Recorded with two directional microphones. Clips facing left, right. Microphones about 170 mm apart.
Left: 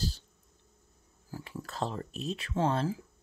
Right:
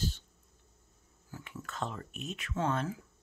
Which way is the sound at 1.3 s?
35° left (ahead or behind).